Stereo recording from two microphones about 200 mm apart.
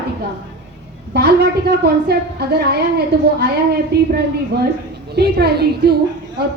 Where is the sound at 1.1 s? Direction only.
55° right (ahead or behind).